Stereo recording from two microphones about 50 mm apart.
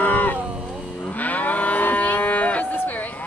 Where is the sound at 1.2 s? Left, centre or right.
Left.